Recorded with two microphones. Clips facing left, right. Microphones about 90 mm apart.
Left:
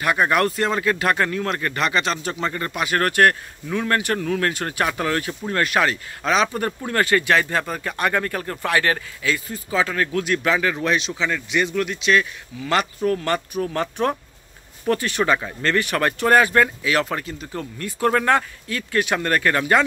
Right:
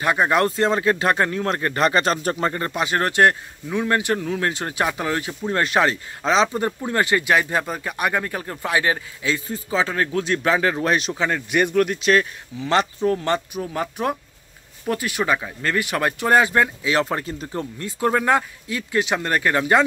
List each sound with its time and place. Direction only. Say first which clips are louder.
0.0 s speech: even; 25° right (ahead or behind); by 2.5 s 40° right (ahead or behind)
2.5 s speech: right 1 dB; 25° right (ahead or behind)
5.5 s speech: right 1 dB; 25° right (ahead or behind); by 12.3 s 40° right (ahead or behind)
12.5 s speech: right 2 dB; 25° right (ahead or behind)